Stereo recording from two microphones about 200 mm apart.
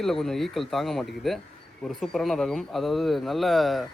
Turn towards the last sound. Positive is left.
turn(degrees=0)  # may be behind; listen again after turning